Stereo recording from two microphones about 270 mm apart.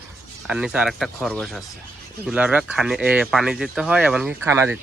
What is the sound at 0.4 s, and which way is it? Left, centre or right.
Speech, centre.